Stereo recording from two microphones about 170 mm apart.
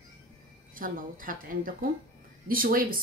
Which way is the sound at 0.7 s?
55° right (ahead or behind).